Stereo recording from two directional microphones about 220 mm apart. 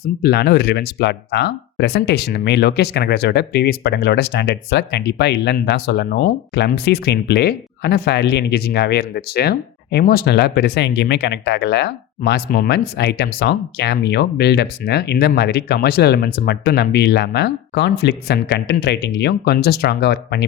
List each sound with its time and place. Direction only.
0.2 s speech: 50° left (ahead or behind)